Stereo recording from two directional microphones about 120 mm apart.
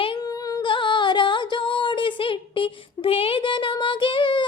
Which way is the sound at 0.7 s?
40° left (ahead or behind).